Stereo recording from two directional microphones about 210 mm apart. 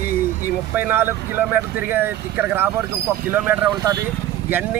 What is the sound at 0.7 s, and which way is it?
Speech, 10° right (ahead or behind).